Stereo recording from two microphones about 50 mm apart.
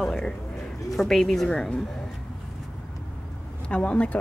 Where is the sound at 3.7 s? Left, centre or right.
Left.